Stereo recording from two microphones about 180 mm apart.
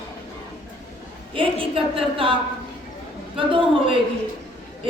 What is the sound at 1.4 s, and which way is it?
Speech, 30° right (ahead or behind).